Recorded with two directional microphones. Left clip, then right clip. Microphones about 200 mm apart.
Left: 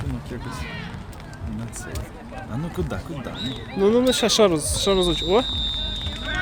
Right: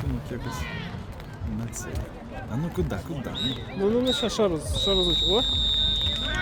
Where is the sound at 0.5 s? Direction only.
45° right (ahead or behind).